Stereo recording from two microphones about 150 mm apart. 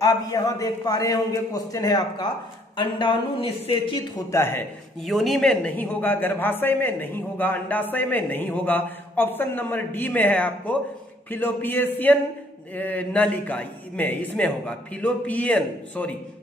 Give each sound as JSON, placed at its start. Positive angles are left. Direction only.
{"t": 0.0, "sound": "a man's voice", "side_deg": 25}
{"t": 4.3, "sound": "a man's voice", "side_deg": 15}
{"t": 5.0, "sound": "a man's voice", "side_deg": 0}